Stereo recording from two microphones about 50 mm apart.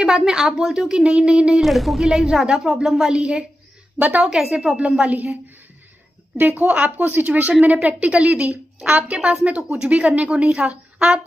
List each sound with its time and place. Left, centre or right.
0.0 s a woman's voice: centre
1.6 s speech: centre
2.0 s a woman's voice: centre
6.3 s a woman's voice: right